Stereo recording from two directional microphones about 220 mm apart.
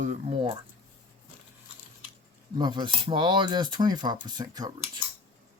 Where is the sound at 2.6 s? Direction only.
20° right (ahead or behind).